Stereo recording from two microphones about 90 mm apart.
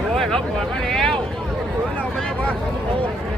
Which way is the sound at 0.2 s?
5° left (ahead or behind).